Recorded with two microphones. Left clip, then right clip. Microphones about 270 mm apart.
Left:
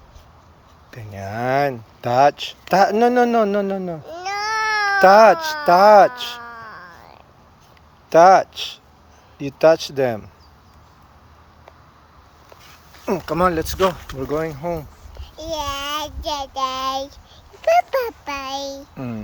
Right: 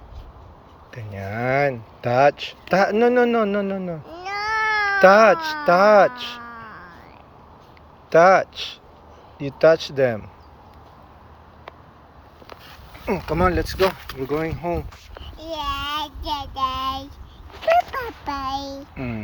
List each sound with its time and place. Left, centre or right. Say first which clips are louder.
0.9 s a man's voice: left 1 dB; left
4.0 s baby cry: left 2 dB; centre
4.9 s a man's voice: left 2 dB; left
8.1 s a man's voice: left 3 dB; left
13.1 s a man's voice: left 2 dB; left
13.7 s speech: left 1 dB; right
14.2 s a man's voice: even; left
15.4 s child singing: left 2 dB; centre
17.7 s a child's voice: left 3 dB; left
18.1 s a child's voice: right 1 dB; centre
18.8 s a man's voice: even; left